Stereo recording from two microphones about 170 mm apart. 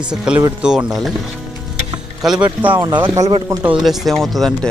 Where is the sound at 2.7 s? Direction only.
25° right (ahead or behind).